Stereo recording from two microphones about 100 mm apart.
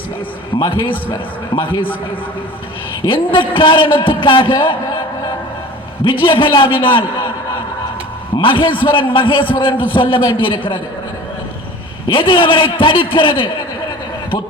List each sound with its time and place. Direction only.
0.5 s a man's voice: 55° left (ahead or behind)
3.0 s a man's voice: 55° left (ahead or behind)
6.1 s a man's voice: 55° left (ahead or behind)
8.4 s a man's voice: 55° left (ahead or behind)
12.0 s a man's voice: 55° left (ahead or behind)